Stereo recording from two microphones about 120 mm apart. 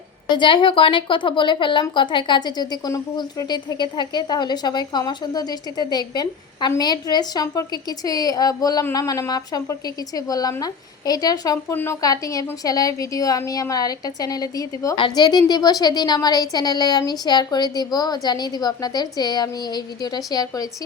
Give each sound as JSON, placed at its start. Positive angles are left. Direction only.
{"t": 0.3, "sound": "a woman's voice", "side_deg": 40}
{"t": 11.7, "sound": "a woman's voice", "side_deg": 15}
{"t": 12.0, "sound": "a woman's voice", "side_deg": 30}
{"t": 14.9, "sound": "a woman's voice", "side_deg": 40}